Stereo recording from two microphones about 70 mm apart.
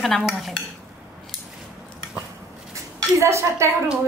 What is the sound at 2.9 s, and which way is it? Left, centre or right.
Speech, right.